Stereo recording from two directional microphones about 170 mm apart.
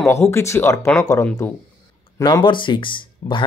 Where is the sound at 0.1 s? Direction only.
15° left (ahead or behind).